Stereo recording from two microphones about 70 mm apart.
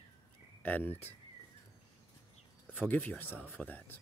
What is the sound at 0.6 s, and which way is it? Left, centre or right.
Speech, left.